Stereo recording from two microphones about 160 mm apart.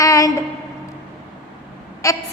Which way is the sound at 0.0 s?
20° left (ahead or behind).